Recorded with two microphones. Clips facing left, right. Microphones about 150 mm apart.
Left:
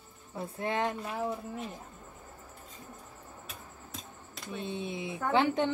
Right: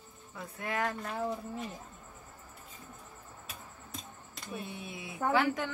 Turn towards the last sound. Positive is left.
turn(degrees=25)  # may be behind; listen again after turning